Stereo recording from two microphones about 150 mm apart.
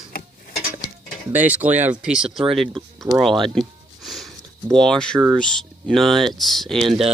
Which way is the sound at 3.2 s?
Centre (ahead or behind).